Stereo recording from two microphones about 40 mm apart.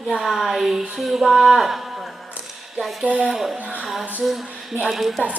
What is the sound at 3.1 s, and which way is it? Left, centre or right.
Speech, right.